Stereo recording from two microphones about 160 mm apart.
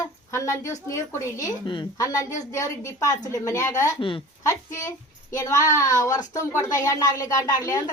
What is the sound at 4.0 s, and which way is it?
Speech, 35° left (ahead or behind).